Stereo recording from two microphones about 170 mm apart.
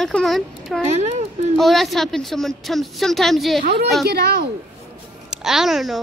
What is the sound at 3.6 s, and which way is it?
Speech, 70° right (ahead or behind).